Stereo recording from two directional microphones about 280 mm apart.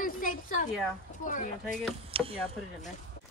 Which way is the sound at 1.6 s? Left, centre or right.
Centre.